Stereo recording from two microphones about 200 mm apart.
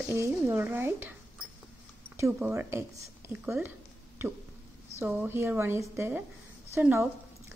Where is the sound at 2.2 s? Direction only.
10° right (ahead or behind).